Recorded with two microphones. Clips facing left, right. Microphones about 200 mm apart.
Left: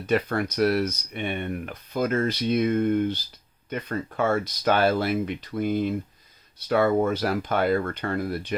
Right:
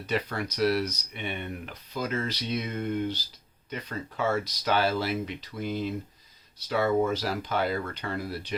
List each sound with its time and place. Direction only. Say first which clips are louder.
0.1 s speech: left 6 dB; 50° left (ahead or behind)